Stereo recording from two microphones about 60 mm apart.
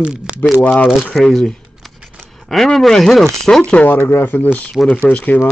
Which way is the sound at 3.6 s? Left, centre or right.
Centre.